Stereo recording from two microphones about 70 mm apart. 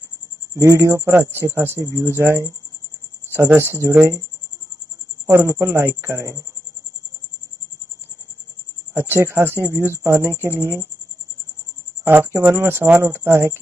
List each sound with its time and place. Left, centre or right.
0.6 s speech: right
3.5 s speech: right
5.2 s speech: right
8.9 s speech: right
12.0 s speech: right